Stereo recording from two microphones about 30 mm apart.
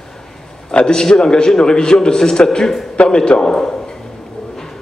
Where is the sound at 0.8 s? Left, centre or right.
Left.